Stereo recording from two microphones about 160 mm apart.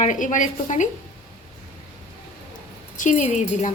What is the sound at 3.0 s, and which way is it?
Speech, 50° left (ahead or behind).